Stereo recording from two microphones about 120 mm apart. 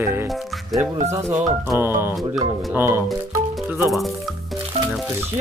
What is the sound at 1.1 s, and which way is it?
Speech, 25° right (ahead or behind).